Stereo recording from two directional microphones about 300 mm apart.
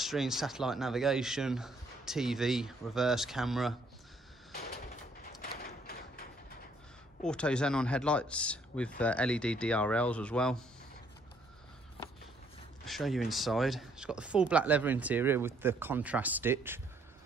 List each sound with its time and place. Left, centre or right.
0.0 s speech: centre
5.4 s a sound: left
7.2 s speech: centre
12.8 s speech: centre